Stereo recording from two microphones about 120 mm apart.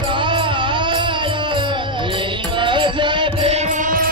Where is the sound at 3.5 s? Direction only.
80° right.